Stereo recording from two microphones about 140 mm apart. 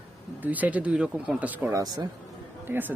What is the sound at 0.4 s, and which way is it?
Speech, 10° right (ahead or behind).